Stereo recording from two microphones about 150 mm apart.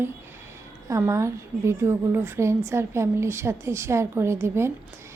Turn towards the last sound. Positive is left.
turn(degrees=-15)  # may be behind; listen again after turning